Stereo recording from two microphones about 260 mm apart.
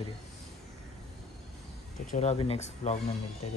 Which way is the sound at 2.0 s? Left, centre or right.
Left.